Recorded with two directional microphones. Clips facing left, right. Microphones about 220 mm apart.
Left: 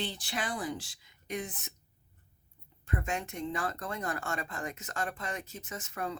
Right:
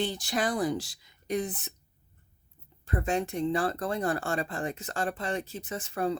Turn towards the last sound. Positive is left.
turn(degrees=-30)  # may be behind; listen again after turning